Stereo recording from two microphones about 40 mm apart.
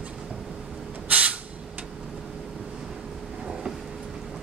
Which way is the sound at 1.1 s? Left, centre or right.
Right.